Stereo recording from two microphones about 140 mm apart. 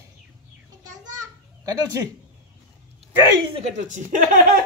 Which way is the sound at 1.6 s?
25° right (ahead or behind).